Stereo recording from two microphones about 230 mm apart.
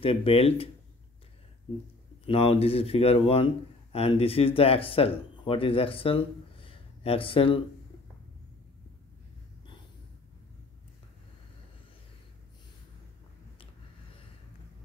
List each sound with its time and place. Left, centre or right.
0.0 s speech: left
2.2 s speech: left